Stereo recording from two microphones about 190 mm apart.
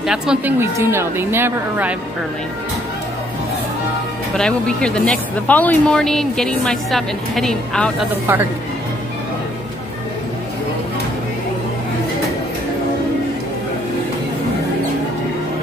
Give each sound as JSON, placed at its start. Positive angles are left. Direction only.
{"t": 0.0, "sound": "a woman's voice", "side_deg": -5}
{"t": 4.4, "sound": "speech", "side_deg": 5}
{"t": 8.1, "sound": "a woman's voice", "side_deg": -10}